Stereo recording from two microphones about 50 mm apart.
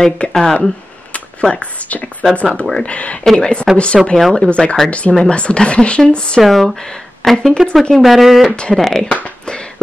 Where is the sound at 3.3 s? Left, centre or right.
Centre.